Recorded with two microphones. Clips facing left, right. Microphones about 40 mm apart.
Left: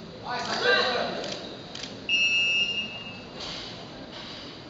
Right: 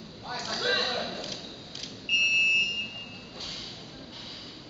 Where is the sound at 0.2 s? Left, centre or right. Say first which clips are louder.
Left 5 dB; centre.